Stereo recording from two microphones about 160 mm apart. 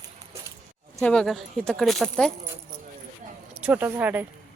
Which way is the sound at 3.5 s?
10° right (ahead or behind).